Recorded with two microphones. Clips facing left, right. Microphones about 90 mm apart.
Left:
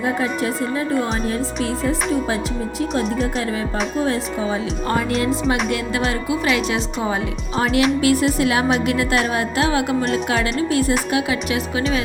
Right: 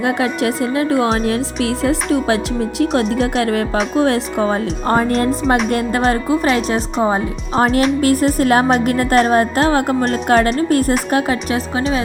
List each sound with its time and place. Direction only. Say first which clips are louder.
0.0 s speech: right 4 dB; 75° right (ahead or behind); by 4.6 s 55° right (ahead or behind)
4.9 s a woman's voice: right 5 dB; 40° right (ahead or behind)